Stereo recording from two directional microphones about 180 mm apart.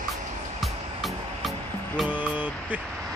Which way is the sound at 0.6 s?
Centre (ahead or behind).